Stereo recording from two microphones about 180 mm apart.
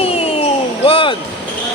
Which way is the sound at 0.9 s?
30° left (ahead or behind).